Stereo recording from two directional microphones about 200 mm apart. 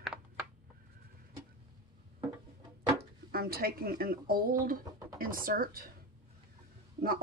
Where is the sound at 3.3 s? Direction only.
50° right (ahead or behind).